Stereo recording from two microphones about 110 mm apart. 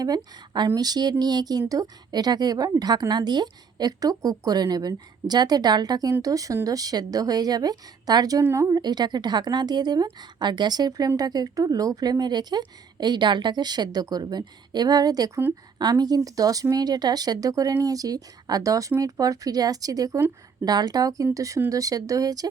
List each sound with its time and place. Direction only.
0.2 s a woman's voice: 40° right (ahead or behind)